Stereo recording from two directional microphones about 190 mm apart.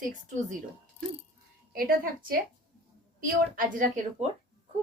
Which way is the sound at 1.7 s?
50° right (ahead or behind).